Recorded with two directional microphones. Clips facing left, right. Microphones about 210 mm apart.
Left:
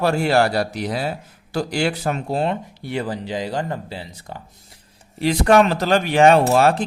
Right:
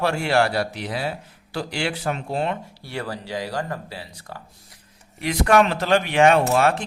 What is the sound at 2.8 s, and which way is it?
A man's voice, 20° left (ahead or behind).